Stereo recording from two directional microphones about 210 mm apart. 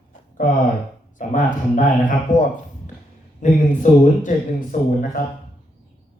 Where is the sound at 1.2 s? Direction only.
40° left (ahead or behind).